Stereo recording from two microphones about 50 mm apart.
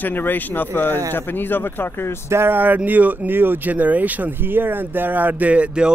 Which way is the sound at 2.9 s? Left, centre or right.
Right.